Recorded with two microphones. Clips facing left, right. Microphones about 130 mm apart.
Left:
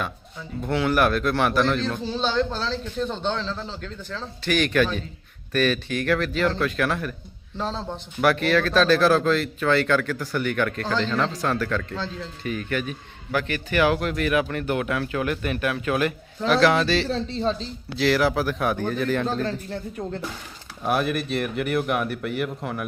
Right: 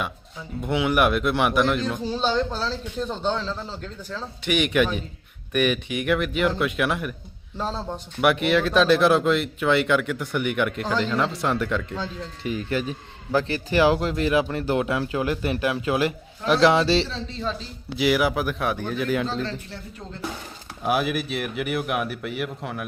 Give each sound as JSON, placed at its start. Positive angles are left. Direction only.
{"t": 0.7, "sound": "a man's voice", "side_deg": -15}
{"t": 17.1, "sound": "a man's voice", "side_deg": 35}
{"t": 17.6, "sound": "a man's voice", "side_deg": -10}
{"t": 19.3, "sound": "speech", "side_deg": 50}
{"t": 20.8, "sound": "a man's voice", "side_deg": -5}